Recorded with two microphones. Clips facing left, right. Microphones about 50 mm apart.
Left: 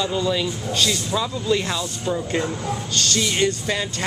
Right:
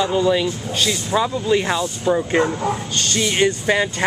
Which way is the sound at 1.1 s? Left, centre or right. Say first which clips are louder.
Right 7 dB; right.